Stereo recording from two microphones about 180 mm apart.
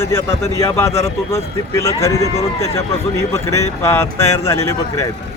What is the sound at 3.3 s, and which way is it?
Speech, 15° left (ahead or behind).